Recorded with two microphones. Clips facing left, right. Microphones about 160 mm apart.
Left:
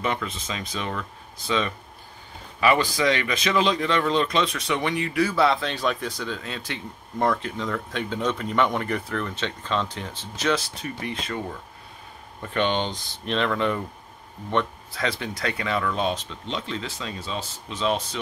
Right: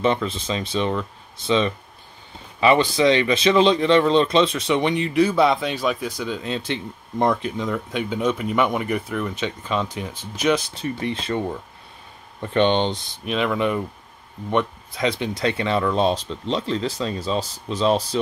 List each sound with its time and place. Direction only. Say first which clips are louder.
0.0 s speech: right 7 dB; 30° right (ahead or behind)
10.7 s speech: right 6 dB; 25° right (ahead or behind)
13.2 s speech: right 2 dB; 10° right (ahead or behind); by 18.2 s 35° right (ahead or behind)